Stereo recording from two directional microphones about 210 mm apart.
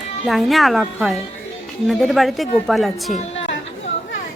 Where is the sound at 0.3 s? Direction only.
Centre (ahead or behind).